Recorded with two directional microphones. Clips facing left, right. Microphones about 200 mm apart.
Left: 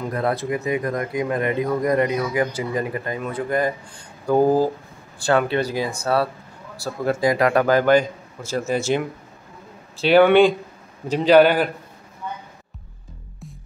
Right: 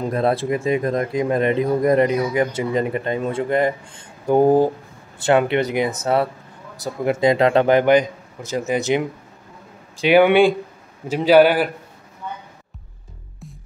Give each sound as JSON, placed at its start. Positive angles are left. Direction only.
{"t": 0.1, "sound": "a man's voice", "side_deg": -25}